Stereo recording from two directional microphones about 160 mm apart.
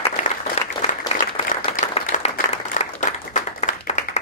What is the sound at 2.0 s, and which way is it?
Applause, 55° left (ahead or behind).